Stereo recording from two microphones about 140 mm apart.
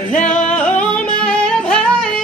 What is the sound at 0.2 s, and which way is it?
Music, 60° left (ahead or behind).